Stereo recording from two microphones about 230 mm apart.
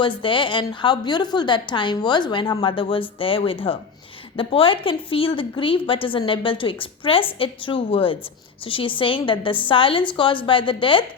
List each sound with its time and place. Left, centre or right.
0.0 s a woman's voice: left